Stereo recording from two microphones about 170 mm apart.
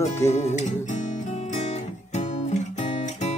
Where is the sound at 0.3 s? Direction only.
40° left (ahead or behind).